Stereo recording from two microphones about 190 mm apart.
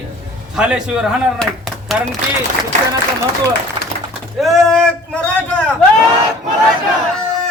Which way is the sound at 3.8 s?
25° right (ahead or behind).